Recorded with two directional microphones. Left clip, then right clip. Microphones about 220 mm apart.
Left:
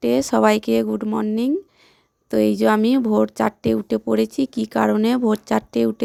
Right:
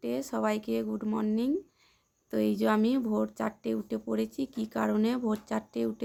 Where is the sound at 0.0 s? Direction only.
40° left (ahead or behind).